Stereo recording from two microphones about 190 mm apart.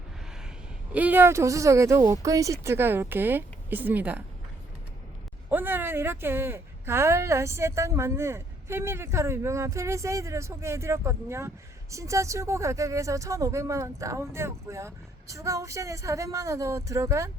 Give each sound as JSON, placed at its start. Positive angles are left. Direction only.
{"t": 0.9, "sound": "speech", "side_deg": -10}
{"t": 5.5, "sound": "speech", "side_deg": -10}